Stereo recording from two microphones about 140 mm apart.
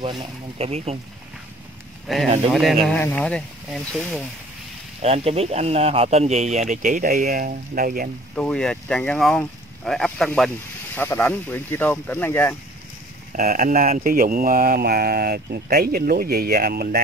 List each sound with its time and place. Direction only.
0.0 s speech: 40° right (ahead or behind)
2.1 s speech: centre (ahead or behind)
3.0 s speech: 10° left (ahead or behind)
5.0 s speech: 45° right (ahead or behind); by 8.1 s 85° right
8.4 s speech: 5° left (ahead or behind)
11.0 s speech: 15° left (ahead or behind)
13.3 s mantra: 75° right (ahead or behind); by 17.0 s 90° right